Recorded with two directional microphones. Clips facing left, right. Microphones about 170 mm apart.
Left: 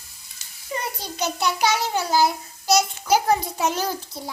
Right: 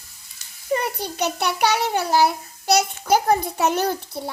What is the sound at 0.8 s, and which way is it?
A child's voice, 60° right (ahead or behind).